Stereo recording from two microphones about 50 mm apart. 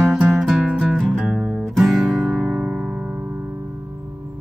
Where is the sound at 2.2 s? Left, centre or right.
Right.